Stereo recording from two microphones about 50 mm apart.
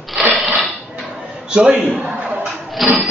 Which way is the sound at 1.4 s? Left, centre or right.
Centre.